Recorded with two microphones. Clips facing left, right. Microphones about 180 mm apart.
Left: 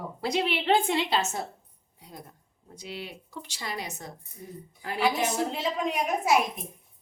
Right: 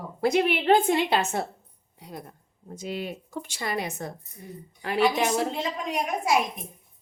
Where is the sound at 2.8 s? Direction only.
50° right (ahead or behind).